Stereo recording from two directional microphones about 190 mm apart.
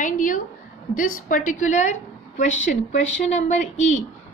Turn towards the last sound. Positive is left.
turn(degrees=40)  # may be behind; listen again after turning